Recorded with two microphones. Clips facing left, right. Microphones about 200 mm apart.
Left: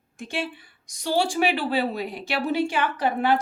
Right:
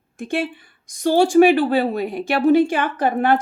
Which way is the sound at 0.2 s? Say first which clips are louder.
Right 7 dB; 55° right (ahead or behind).